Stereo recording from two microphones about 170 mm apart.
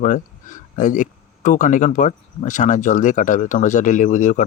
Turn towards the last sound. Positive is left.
turn(degrees=45)  # may be behind; listen again after turning